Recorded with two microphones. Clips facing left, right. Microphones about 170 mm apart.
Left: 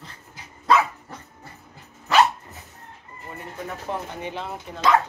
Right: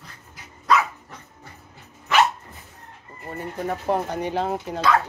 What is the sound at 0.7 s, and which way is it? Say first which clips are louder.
Dog: left 1 dB; 30° left (ahead or behind).